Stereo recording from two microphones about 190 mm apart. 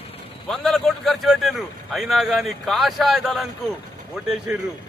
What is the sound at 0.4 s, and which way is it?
A man's voice, centre (ahead or behind).